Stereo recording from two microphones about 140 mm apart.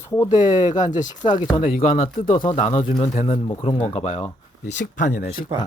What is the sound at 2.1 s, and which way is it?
Speech, 35° left (ahead or behind).